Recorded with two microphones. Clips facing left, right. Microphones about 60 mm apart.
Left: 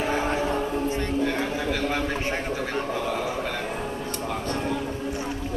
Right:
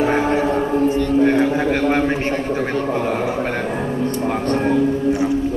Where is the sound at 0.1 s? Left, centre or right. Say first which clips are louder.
Right 7 dB; right.